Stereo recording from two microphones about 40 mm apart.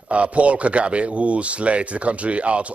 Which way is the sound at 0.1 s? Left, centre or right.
Right.